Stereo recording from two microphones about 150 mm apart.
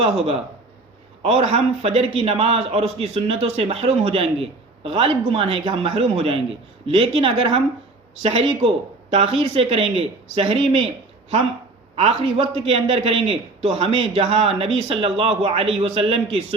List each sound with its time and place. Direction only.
1.2 s a man's voice: 40° right (ahead or behind)
11.9 s a man's voice: 45° right (ahead or behind)